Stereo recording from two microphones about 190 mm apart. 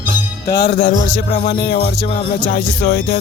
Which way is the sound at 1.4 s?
30° left (ahead or behind).